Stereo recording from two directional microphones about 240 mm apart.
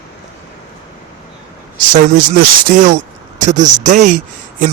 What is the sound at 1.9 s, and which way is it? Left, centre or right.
Speech, right.